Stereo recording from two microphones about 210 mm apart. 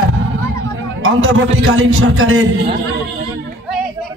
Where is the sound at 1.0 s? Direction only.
70° right (ahead or behind).